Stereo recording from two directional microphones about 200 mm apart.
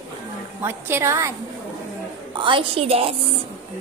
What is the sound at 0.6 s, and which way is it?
Speech, 10° right (ahead or behind).